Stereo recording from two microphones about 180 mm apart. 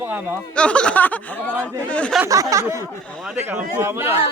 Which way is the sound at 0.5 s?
5° left (ahead or behind).